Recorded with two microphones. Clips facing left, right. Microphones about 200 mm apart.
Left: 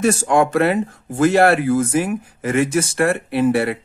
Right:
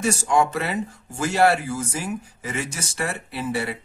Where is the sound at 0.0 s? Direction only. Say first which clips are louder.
Left 5 dB; 55° left (ahead or behind).